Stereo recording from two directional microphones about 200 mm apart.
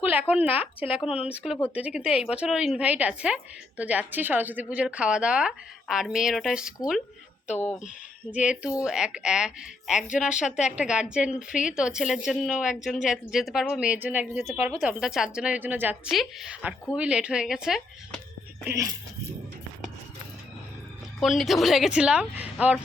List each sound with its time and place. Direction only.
0.0 s speech: 10° right (ahead or behind)
8.3 s speech: 5° right (ahead or behind)
10.1 s a woman's voice: 40° left (ahead or behind)
10.4 s a woman's voice: 5° right (ahead or behind)
18.6 s a woman's voice: 15° right (ahead or behind)
21.2 s speech: centre (ahead or behind)